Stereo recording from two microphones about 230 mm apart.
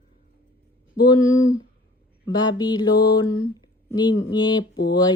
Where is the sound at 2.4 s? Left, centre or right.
Centre.